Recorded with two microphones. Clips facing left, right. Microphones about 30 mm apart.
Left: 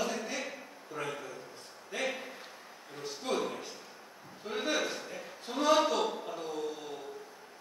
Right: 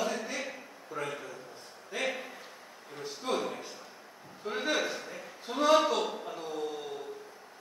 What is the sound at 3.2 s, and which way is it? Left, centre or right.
Speech, centre.